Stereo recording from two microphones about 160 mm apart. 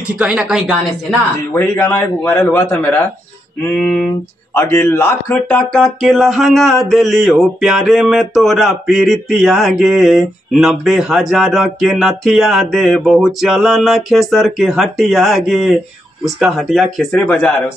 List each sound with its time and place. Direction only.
0.2 s speech: 5° right (ahead or behind)
1.5 s a man's voice: 10° left (ahead or behind)